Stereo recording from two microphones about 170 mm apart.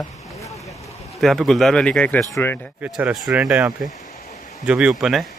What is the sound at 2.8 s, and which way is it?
Speech, 5° right (ahead or behind).